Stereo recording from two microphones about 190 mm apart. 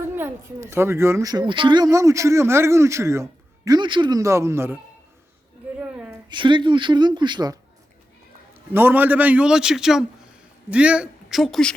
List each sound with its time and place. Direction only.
0.2 s speech: 15° right (ahead or behind)
5.8 s a sound: 5° right (ahead or behind)
6.2 s speech: 25° right (ahead or behind)
8.7 s speech: 10° right (ahead or behind)